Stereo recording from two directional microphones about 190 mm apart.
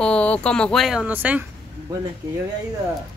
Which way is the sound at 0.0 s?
5° left (ahead or behind).